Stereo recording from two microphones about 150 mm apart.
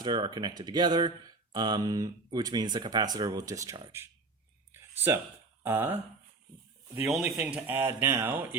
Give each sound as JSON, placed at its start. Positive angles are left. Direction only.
{"t": 0.0, "sound": "speech", "side_deg": -30}
{"t": 4.7, "sound": "a sound", "side_deg": -15}
{"t": 5.6, "sound": "speech", "side_deg": -15}
{"t": 7.1, "sound": "speech", "side_deg": 0}
{"t": 7.3, "sound": "speech", "side_deg": -10}